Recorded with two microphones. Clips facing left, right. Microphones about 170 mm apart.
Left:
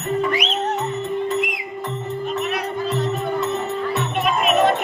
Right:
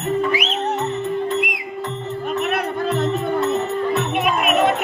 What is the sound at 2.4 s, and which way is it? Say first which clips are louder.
Music: right 2 dB; 55° right (ahead or behind).